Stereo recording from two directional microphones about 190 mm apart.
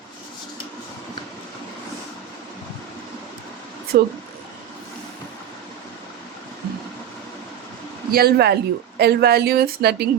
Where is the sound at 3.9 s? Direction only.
55° right (ahead or behind).